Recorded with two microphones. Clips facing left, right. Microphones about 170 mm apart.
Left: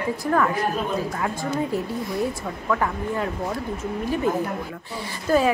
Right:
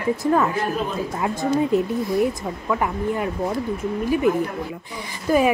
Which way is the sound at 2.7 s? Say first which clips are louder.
Right 2 dB; 15° right (ahead or behind).